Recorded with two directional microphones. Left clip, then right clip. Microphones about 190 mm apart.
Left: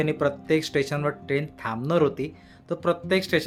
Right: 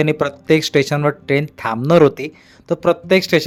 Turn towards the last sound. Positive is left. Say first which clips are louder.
# right 9 dB
turn(degrees=-40)  # may be behind; listen again after turning